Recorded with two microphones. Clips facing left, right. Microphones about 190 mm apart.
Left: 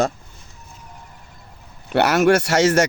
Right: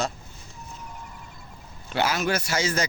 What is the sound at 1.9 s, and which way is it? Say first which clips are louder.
Speech: left 10 dB; 65° left (ahead or behind).